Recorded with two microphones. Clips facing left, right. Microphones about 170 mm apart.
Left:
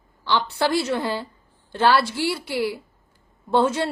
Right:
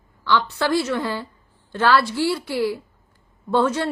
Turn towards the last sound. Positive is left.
turn(degrees=25)  # may be behind; listen again after turning